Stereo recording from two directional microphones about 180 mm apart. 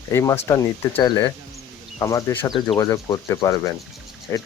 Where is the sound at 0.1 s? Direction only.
15° left (ahead or behind).